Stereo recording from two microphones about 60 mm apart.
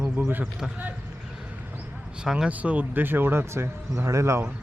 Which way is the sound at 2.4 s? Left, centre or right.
Right.